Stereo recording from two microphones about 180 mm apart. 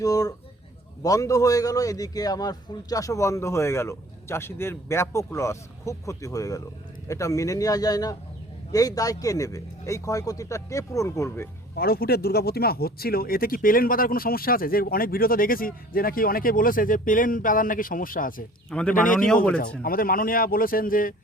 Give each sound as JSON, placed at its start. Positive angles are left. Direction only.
{"t": 0.0, "sound": "a man's voice", "side_deg": 20}
{"t": 11.7, "sound": "speech", "side_deg": 60}
{"t": 18.7, "sound": "speech", "side_deg": 5}
{"t": 18.9, "sound": "speech", "side_deg": 50}